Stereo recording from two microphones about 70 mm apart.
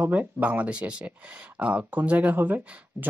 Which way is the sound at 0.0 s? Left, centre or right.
Right.